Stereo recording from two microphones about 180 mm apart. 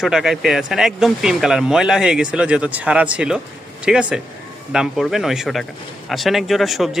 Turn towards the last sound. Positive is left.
turn(degrees=0)  # may be behind; listen again after turning